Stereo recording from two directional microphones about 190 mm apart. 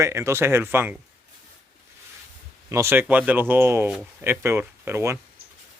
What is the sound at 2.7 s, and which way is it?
Speech, 15° right (ahead or behind).